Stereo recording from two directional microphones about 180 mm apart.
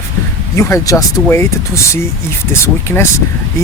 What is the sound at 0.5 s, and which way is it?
Speech, 15° left (ahead or behind).